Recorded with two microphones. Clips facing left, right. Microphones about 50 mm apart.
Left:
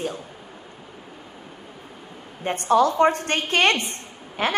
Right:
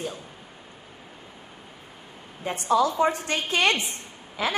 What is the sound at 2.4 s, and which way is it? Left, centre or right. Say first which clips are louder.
A woman's voice: left 4 dB; left.